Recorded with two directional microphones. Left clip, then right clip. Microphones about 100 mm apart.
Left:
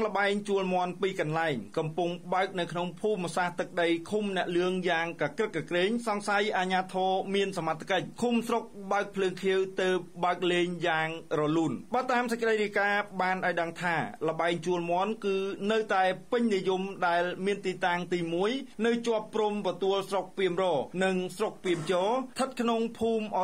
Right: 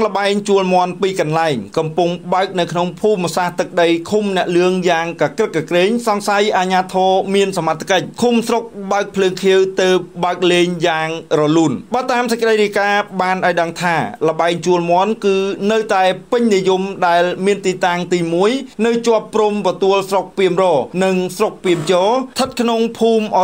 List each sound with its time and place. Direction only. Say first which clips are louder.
0.0 s speech: right 12 dB; 25° right (ahead or behind)